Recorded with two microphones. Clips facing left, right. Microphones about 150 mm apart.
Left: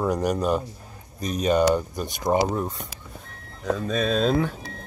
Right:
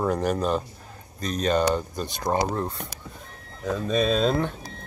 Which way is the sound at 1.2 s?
15° left (ahead or behind).